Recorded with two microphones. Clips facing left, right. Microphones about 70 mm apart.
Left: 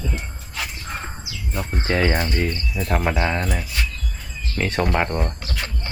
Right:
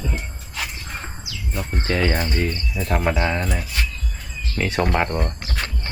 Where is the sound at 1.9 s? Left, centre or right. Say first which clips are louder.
Left 1 dB; centre.